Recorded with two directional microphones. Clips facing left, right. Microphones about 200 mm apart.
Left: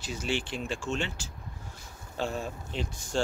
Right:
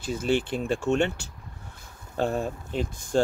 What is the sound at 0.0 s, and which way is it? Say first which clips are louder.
Speech: right 7 dB; 55° right (ahead or behind).